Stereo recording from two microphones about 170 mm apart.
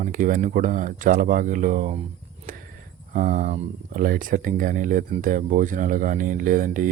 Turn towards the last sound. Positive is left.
turn(degrees=-50)  # may be behind; listen again after turning